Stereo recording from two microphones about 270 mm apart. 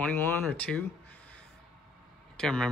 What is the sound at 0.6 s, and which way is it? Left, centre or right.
Speech, centre.